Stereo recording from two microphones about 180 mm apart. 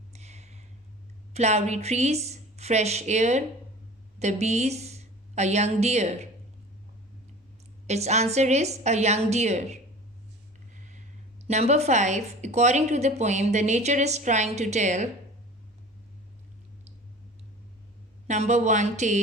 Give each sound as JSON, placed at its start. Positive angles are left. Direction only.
{"t": 0.1, "sound": "a sound", "side_deg": -40}
{"t": 1.3, "sound": "a woman's voice", "side_deg": -40}
{"t": 7.9, "sound": "speech", "side_deg": -40}
{"t": 11.4, "sound": "speech", "side_deg": -40}
{"t": 18.3, "sound": "speech", "side_deg": -40}